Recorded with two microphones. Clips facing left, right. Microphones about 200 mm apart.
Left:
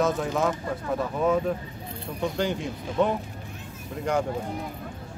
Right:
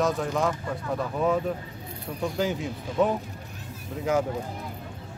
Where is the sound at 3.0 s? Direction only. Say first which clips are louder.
Even; centre (ahead or behind).